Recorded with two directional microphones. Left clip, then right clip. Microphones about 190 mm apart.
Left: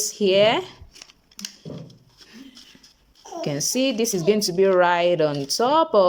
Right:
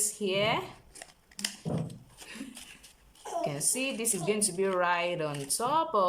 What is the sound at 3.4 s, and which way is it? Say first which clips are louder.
A woman's voice: left 10 dB; 35° left (ahead or behind).